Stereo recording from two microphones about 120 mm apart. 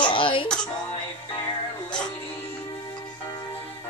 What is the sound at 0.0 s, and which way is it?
Music, 45° left (ahead or behind).